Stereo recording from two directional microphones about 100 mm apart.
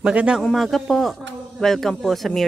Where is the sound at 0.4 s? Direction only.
Centre (ahead or behind).